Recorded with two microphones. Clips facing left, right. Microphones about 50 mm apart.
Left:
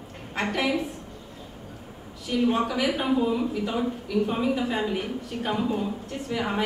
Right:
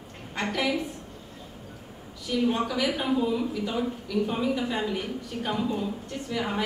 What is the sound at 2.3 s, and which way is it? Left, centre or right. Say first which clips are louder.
A woman's voice: left 2 dB; centre.